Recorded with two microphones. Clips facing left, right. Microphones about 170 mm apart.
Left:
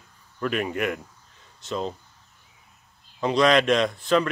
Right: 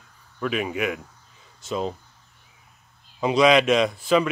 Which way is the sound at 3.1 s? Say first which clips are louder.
Right 2 dB; 10° right (ahead or behind).